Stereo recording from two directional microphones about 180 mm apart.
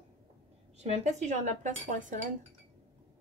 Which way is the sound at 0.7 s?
40° right (ahead or behind).